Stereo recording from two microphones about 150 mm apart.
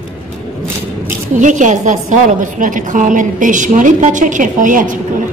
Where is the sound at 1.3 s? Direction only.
55° right (ahead or behind).